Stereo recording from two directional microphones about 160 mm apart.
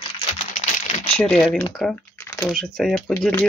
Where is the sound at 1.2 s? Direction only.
5° left (ahead or behind).